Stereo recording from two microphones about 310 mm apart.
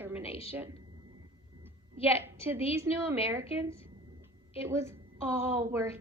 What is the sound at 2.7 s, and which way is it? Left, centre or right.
A woman's voice, centre.